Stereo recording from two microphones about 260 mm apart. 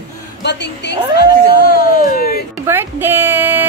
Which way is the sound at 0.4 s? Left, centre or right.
Left.